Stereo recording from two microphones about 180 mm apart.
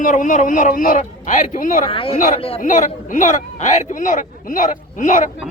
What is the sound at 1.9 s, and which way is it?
Speech, 30° left (ahead or behind).